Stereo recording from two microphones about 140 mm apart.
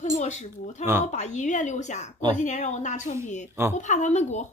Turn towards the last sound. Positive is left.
turn(degrees=55)  # may be behind; listen again after turning